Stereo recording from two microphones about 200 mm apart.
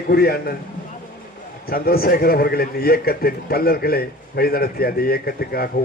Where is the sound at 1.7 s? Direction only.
50° left (ahead or behind).